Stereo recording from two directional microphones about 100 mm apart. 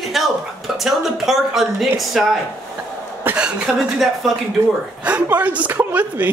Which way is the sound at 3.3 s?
10° right (ahead or behind).